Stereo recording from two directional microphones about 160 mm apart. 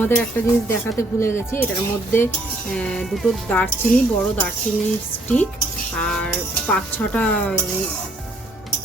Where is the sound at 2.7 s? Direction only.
5° left (ahead or behind).